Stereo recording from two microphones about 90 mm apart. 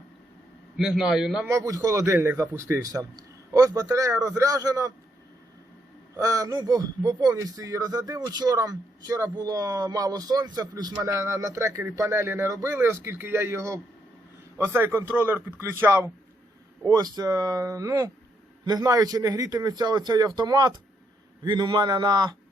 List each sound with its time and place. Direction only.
0.8 s a man's voice: 5° right (ahead or behind)
1.5 s speech: 35° right (ahead or behind)
6.1 s speech: 40° right (ahead or behind)
16.9 s a man's voice: 45° right (ahead or behind)